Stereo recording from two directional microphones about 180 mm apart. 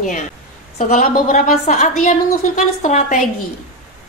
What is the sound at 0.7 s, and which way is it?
Speech, 45° left (ahead or behind).